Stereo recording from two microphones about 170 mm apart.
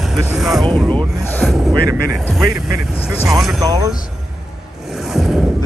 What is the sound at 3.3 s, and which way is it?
Speech, centre (ahead or behind).